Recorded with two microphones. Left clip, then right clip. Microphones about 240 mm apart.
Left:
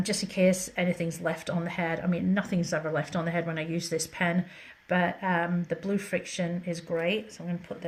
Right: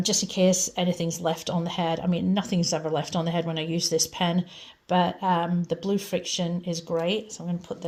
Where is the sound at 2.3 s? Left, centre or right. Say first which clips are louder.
Right 2 dB; right.